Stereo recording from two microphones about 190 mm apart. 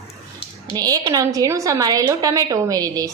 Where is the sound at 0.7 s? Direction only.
20° right (ahead or behind).